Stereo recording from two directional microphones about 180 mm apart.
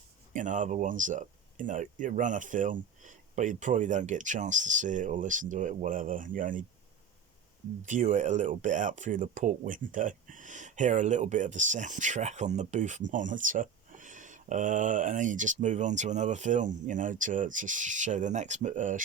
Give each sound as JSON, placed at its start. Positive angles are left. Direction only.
{"t": 0.3, "sound": "speech", "side_deg": -45}
{"t": 7.8, "sound": "speech", "side_deg": -40}